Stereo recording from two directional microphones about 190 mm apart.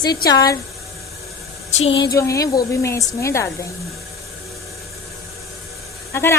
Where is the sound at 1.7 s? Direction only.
35° left (ahead or behind).